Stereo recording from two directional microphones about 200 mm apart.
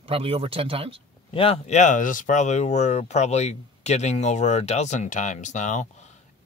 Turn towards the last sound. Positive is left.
turn(degrees=35)  # may be behind; listen again after turning